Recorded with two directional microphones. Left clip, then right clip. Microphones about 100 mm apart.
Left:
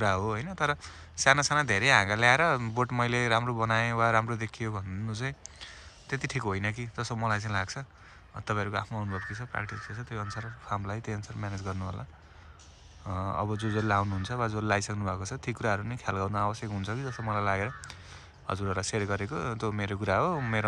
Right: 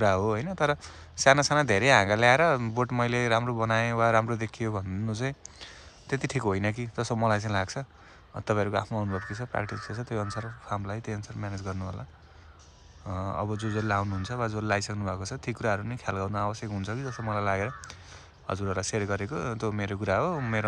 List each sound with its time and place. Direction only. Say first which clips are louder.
0.0 s speech: right 4 dB; 35° right (ahead or behind)
9.7 s speech: right 4 dB; 50° right (ahead or behind)
10.6 s speech: left 1 dB; 25° right (ahead or behind)
13.0 s speech: even; 15° right (ahead or behind)